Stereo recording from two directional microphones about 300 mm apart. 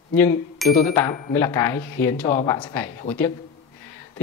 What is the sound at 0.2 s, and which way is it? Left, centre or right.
Speech, centre.